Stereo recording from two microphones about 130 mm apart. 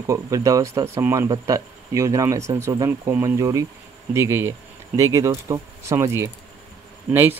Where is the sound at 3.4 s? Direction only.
25° right (ahead or behind).